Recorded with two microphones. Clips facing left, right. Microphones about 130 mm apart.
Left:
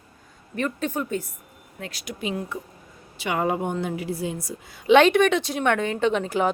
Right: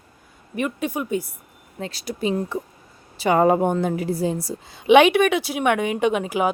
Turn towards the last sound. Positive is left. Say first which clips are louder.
# right 1 dB
turn(degrees=-10)  # may be behind; listen again after turning